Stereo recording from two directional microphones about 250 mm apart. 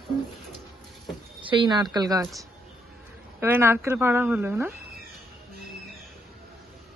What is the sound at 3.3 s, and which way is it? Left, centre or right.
A woman's voice, centre.